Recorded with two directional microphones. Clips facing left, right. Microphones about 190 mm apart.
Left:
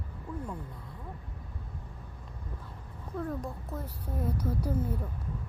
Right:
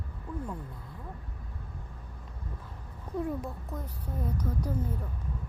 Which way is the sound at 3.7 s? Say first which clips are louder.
Left 1 dB; 5° left (ahead or behind).